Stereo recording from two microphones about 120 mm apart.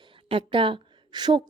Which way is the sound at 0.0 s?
45° right (ahead or behind).